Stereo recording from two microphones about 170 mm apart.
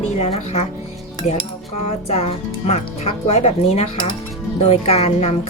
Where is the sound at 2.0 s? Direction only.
40° left (ahead or behind).